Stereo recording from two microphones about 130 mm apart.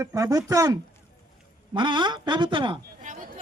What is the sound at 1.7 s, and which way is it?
Speech, 40° right (ahead or behind).